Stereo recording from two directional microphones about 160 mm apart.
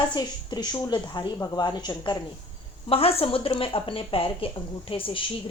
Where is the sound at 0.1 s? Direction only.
25° left (ahead or behind).